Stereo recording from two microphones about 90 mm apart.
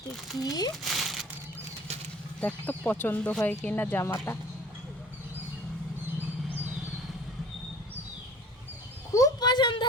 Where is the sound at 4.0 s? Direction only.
30° left (ahead or behind).